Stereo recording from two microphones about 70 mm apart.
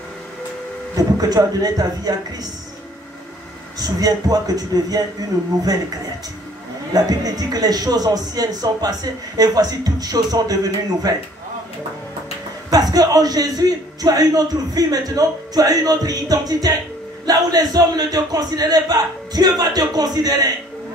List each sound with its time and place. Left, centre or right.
0.9 s a man's voice: right
3.8 s a man's voice: right
6.9 s a man's voice: right
12.6 s a man's voice: right